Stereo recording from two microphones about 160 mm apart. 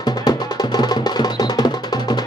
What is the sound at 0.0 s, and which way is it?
Music, 25° left (ahead or behind).